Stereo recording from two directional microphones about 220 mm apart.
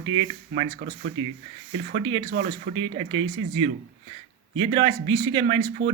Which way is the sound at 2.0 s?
25° right (ahead or behind).